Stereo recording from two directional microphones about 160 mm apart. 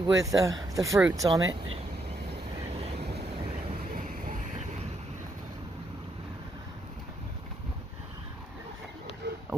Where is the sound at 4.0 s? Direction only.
55° right (ahead or behind).